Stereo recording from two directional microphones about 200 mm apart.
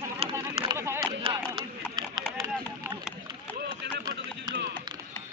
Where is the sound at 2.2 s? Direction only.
5° left (ahead or behind).